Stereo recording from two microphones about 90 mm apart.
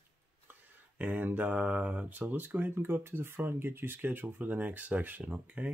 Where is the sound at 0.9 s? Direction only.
20° right (ahead or behind).